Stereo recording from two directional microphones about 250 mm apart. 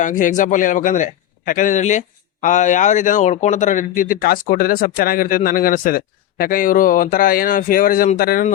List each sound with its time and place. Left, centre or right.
0.0 s a man's voice: left